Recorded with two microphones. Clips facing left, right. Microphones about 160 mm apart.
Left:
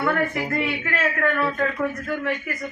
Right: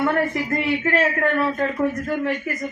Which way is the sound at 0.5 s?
30° right (ahead or behind).